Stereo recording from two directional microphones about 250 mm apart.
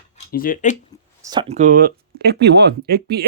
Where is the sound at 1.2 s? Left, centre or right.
Centre.